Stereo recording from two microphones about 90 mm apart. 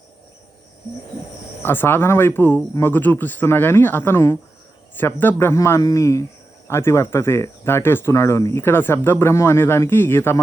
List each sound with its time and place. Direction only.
1.6 s speech: 25° left (ahead or behind)
5.5 s a man's voice: 35° left (ahead or behind)